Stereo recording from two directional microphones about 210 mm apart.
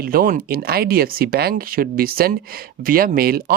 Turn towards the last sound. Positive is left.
turn(degrees=-45)  # may be behind; listen again after turning